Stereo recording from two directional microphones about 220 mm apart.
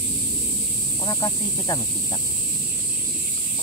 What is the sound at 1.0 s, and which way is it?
Speech, 15° left (ahead or behind).